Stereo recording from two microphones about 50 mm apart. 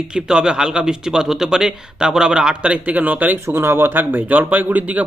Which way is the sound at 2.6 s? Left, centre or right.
Right.